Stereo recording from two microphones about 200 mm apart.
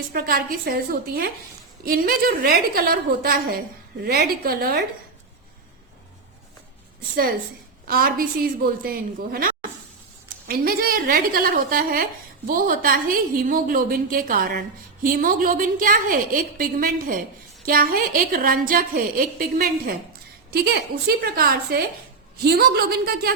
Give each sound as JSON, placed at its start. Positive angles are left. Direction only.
{"t": 0.1, "sound": "a woman's voice", "side_deg": -50}
{"t": 7.9, "sound": "a woman's voice", "side_deg": -45}